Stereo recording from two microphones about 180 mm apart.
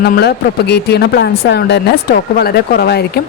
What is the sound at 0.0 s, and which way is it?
Speech, 65° left (ahead or behind).